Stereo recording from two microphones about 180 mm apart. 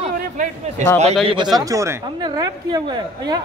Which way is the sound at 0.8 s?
45° right (ahead or behind).